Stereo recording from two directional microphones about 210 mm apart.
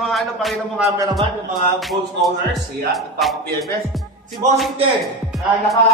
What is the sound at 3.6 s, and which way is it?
Speech, centre (ahead or behind).